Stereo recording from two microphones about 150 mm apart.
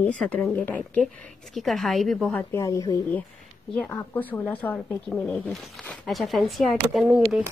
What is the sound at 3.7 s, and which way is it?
A woman's voice, 10° left (ahead or behind).